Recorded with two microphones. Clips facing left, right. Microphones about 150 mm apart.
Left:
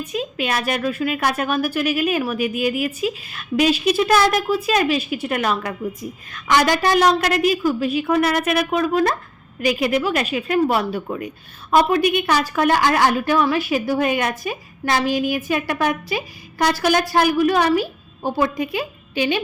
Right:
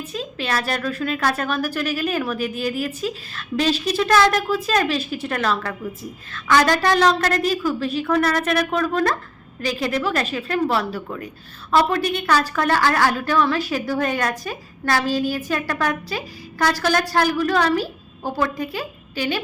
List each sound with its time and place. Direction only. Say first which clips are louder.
0.0 s a woman's voice: left 4 dB; 15° left (ahead or behind)